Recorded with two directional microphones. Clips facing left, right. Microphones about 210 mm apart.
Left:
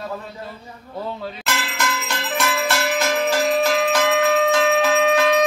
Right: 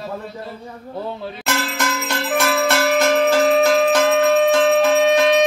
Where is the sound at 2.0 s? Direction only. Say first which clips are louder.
Right 4 dB; 55° right (ahead or behind).